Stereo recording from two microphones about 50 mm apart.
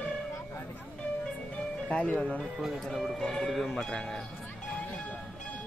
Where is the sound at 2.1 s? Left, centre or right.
Left.